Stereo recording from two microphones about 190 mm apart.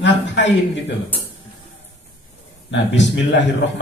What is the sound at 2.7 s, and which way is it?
Speech, 70° left (ahead or behind).